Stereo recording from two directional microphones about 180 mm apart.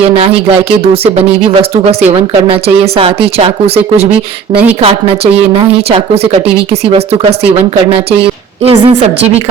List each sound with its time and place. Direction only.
0.2 s speech: 30° right (ahead or behind)